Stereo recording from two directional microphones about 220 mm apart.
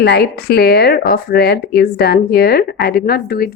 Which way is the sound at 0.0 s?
45° left (ahead or behind).